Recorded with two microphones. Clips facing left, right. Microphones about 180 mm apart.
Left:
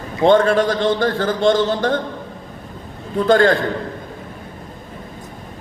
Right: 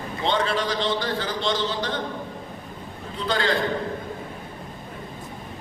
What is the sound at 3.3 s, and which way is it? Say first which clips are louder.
Speech: left 11 dB; 50° left (ahead or behind).